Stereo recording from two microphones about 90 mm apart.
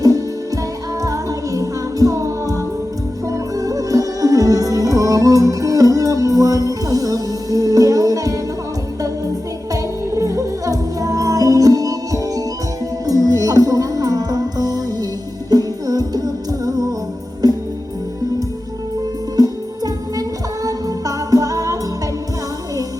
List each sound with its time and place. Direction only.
0.0 s music: 40° right (ahead or behind)
9.7 s music: 40° right (ahead or behind)
19.4 s music: 45° right (ahead or behind)